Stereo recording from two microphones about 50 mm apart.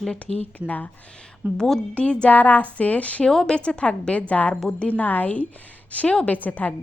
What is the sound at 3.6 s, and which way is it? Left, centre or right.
Speech, left.